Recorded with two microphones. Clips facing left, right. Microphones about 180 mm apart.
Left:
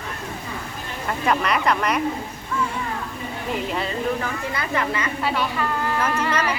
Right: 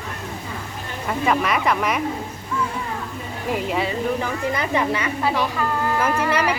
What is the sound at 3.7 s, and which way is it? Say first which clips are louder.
A woman's voice: right 2 dB; 10° right (ahead or behind).